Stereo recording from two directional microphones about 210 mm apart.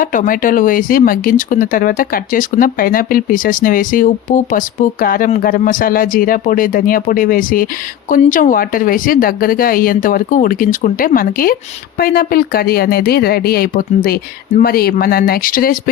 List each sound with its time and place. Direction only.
0.0 s speech: 40° left (ahead or behind)